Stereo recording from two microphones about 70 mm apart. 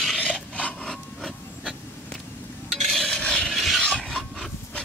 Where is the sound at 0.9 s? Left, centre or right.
Centre.